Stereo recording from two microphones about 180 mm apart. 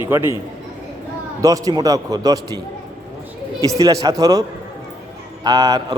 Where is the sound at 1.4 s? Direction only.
20° right (ahead or behind).